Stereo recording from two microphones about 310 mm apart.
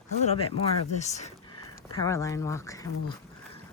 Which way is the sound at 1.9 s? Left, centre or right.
Centre.